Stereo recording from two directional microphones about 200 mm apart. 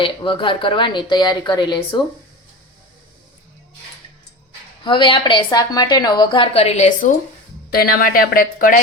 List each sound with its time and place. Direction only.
0.0 s a woman's voice: 25° left (ahead or behind)
4.8 s a woman's voice: 25° left (ahead or behind)
7.7 s a woman's voice: 50° left (ahead or behind)